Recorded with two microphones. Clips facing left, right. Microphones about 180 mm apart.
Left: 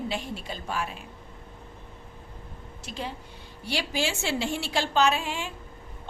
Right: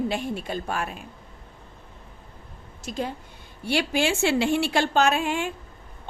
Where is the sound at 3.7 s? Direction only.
60° right (ahead or behind).